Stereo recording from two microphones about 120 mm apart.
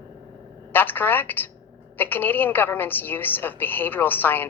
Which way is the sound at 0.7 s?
15° left (ahead or behind).